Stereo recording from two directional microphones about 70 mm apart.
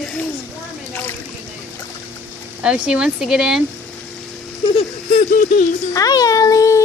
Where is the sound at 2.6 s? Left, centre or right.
Centre.